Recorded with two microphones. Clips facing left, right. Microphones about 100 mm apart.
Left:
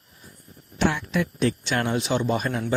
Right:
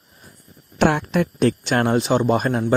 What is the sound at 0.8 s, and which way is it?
Speech, 55° right (ahead or behind).